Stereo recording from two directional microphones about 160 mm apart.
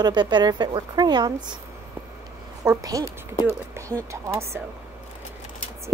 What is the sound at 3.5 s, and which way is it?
Speech, 15° right (ahead or behind).